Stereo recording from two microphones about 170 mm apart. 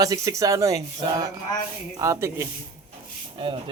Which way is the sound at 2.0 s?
15° right (ahead or behind).